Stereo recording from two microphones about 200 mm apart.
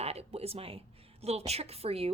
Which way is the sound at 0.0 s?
30° right (ahead or behind).